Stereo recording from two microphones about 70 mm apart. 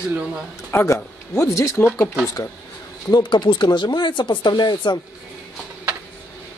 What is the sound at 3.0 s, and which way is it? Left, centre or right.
Speech, left.